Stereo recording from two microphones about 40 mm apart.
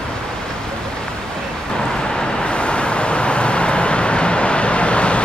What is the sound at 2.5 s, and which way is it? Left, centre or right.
Vehicle, left.